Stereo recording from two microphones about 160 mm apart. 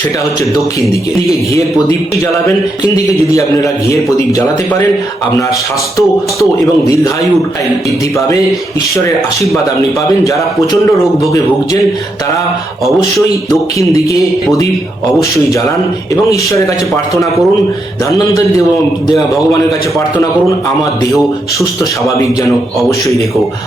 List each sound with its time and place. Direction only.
2.8 s a man's voice: 20° left (ahead or behind)
6.0 s a man's voice: 20° left (ahead or behind)
10.2 s a man's voice: 20° left (ahead or behind)
12.8 s speech: centre (ahead or behind)
13.5 s a man's voice: 20° left (ahead or behind)
16.3 s a man's voice: 20° left (ahead or behind)
21.6 s a man's voice: 20° left (ahead or behind)